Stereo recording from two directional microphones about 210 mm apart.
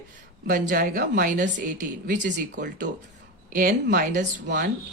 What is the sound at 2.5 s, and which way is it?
Speech, 40° right (ahead or behind).